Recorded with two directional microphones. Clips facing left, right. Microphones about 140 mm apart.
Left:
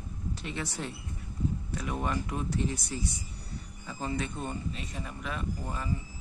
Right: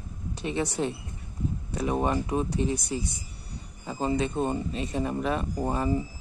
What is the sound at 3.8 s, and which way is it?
Speech, 30° right (ahead or behind).